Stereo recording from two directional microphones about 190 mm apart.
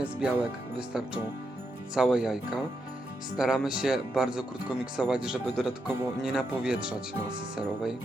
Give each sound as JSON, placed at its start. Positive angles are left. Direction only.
{"t": 0.0, "sound": "speech", "side_deg": -5}